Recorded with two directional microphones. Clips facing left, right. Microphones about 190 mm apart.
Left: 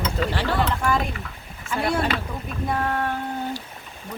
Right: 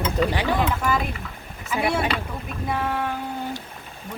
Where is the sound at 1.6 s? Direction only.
5° right (ahead or behind).